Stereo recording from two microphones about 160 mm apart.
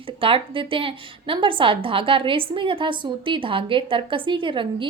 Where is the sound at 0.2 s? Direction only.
35° right (ahead or behind).